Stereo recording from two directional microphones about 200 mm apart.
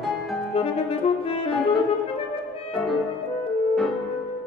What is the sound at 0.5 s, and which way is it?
Saxophone, 30° left (ahead or behind).